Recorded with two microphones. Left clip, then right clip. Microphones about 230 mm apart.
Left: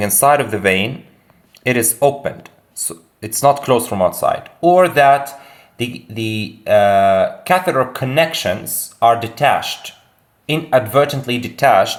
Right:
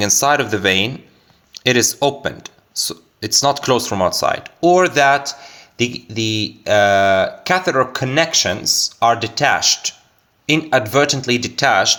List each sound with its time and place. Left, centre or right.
0.0 s speech: right